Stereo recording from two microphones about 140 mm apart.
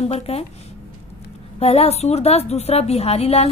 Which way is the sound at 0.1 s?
45° left (ahead or behind).